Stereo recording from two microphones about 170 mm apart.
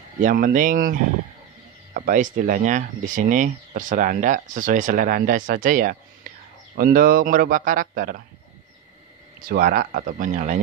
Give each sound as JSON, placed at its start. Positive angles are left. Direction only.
{"t": 0.2, "sound": "speech", "side_deg": -50}
{"t": 9.5, "sound": "speech", "side_deg": -65}